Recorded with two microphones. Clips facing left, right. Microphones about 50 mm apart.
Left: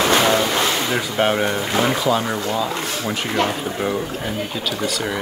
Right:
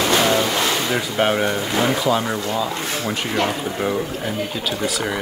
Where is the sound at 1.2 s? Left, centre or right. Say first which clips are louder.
Even; centre.